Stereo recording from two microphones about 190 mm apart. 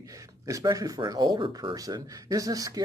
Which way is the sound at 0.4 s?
20° right (ahead or behind).